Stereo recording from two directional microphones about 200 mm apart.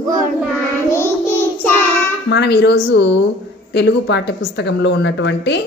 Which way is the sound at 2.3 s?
55° left (ahead or behind).